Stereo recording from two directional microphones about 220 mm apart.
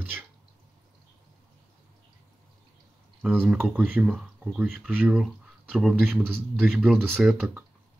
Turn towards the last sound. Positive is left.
turn(degrees=-5)  # may be behind; listen again after turning